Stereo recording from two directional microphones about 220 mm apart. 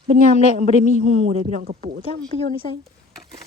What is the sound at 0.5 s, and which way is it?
Speech, 30° right (ahead or behind).